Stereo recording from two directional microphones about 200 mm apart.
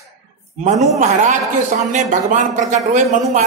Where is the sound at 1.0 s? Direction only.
40° right (ahead or behind).